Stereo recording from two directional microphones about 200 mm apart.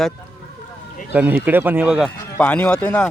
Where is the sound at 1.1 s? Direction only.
10° right (ahead or behind).